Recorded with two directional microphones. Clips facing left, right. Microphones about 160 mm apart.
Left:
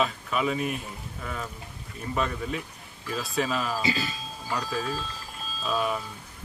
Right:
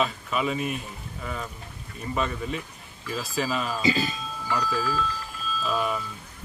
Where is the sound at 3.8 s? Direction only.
20° right (ahead or behind).